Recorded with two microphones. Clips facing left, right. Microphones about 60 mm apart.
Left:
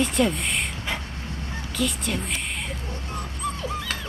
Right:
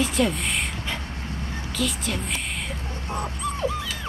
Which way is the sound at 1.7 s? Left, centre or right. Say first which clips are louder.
Left 1 dB; centre.